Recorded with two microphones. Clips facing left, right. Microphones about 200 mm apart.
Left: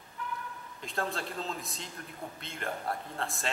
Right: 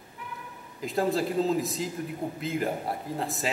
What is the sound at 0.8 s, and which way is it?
A man's voice, 5° right (ahead or behind).